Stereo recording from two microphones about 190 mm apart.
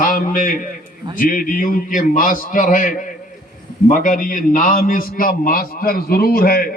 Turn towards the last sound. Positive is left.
turn(degrees=50)  # may be behind; listen again after turning